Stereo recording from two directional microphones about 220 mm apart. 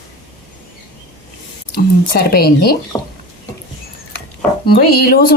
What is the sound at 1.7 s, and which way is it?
Speech, 45° left (ahead or behind).